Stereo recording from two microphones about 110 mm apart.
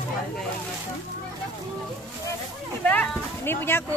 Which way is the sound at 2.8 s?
15° left (ahead or behind).